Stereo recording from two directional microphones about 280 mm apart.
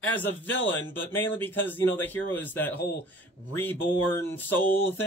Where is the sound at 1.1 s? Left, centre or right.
Centre.